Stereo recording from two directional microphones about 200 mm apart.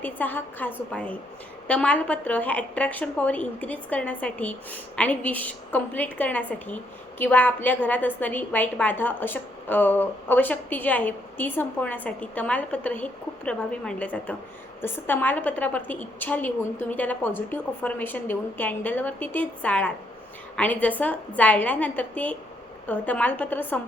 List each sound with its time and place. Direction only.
0.0 s a woman's voice: 10° left (ahead or behind)